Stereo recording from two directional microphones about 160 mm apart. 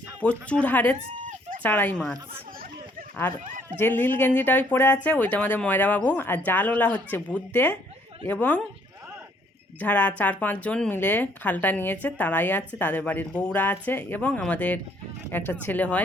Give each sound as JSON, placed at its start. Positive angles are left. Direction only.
{"t": 0.2, "sound": "speech", "side_deg": 10}
{"t": 1.3, "sound": "chicken", "side_deg": -55}
{"t": 1.6, "sound": "speech", "side_deg": 10}
{"t": 3.8, "sound": "speech", "side_deg": 15}
{"t": 9.8, "sound": "speech", "side_deg": 10}